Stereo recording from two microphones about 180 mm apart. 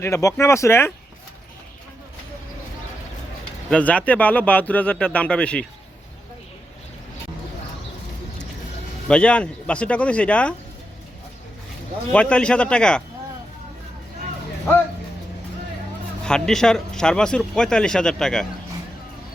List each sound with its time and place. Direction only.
0.0 s speech: 15° left (ahead or behind)
3.7 s speech: 5° left (ahead or behind)
9.0 s speech: 5° left (ahead or behind)
12.1 s speech: 5° left (ahead or behind)
16.2 s speech: 5° left (ahead or behind)